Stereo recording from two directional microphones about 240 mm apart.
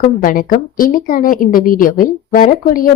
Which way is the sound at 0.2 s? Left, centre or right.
Left.